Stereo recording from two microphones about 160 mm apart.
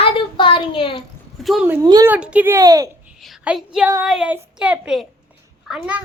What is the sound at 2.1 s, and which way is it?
Speech, 10° right (ahead or behind).